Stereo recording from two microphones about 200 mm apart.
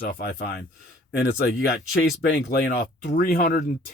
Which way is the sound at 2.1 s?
55° left (ahead or behind).